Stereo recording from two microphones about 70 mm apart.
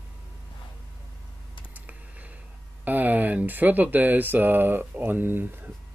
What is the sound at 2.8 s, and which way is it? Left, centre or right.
Speech, right.